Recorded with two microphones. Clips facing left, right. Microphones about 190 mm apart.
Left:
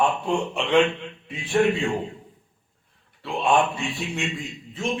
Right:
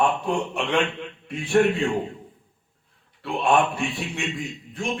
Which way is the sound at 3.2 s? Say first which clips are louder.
Even; centre (ahead or behind).